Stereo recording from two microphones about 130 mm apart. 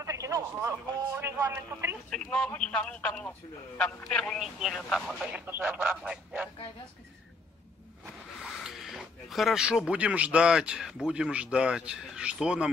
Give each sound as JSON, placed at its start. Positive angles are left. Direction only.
{"t": 0.0, "sound": "speech", "side_deg": -25}
{"t": 2.0, "sound": "speech", "side_deg": 5}
{"t": 5.5, "sound": "speech", "side_deg": -15}
{"t": 8.4, "sound": "speech", "side_deg": -5}